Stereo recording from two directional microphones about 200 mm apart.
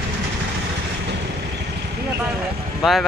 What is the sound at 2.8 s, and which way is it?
Speech, centre (ahead or behind).